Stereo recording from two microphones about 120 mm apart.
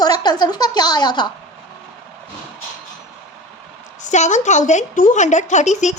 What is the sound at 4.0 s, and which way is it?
A woman's voice, 85° left.